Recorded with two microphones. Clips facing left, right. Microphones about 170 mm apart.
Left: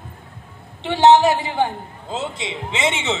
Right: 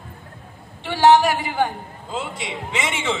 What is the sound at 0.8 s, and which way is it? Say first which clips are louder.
A woman's voice: left 2 dB; 20° left (ahead or behind).